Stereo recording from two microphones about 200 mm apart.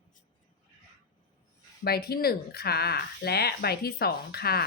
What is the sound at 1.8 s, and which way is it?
Speech, 50° left (ahead or behind).